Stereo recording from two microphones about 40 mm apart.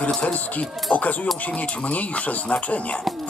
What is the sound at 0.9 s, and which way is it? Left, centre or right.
Speech, left.